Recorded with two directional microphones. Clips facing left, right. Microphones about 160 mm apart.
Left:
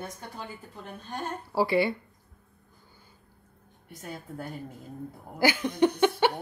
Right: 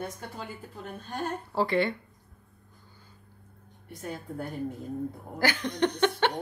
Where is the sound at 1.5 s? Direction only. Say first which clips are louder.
Left 2 dB; 10° left (ahead or behind).